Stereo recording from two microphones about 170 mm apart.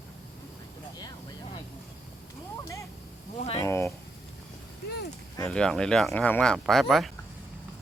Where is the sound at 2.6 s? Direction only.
15° left (ahead or behind).